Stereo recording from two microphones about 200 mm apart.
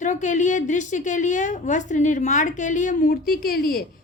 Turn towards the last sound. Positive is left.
turn(degrees=45)  # may be behind; listen again after turning